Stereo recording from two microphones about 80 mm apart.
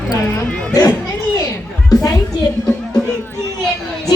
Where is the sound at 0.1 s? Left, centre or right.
Left.